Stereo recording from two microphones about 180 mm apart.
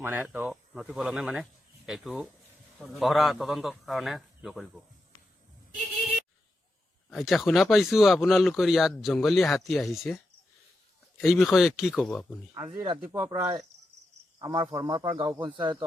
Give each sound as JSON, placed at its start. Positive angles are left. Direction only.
{"t": 0.0, "sound": "speech", "side_deg": -10}
{"t": 7.1, "sound": "speech", "side_deg": 0}
{"t": 11.2, "sound": "speech", "side_deg": 0}
{"t": 12.6, "sound": "speech", "side_deg": -25}
{"t": 13.1, "sound": "speech", "side_deg": -10}
{"t": 14.3, "sound": "speech", "side_deg": -20}